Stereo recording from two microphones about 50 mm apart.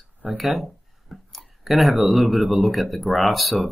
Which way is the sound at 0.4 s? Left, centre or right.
Centre.